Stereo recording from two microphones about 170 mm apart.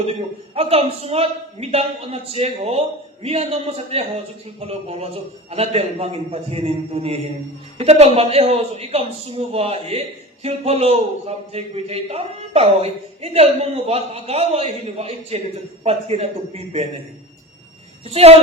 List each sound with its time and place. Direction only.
0.0 s a man's voice: 35° right (ahead or behind)
18.1 s a man's voice: 35° right (ahead or behind)